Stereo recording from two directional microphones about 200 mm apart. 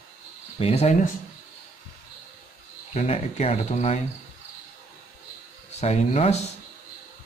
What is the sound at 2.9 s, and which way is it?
Speech, 30° left (ahead or behind).